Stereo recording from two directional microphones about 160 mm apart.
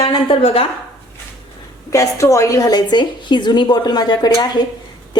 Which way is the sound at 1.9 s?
20° left (ahead or behind).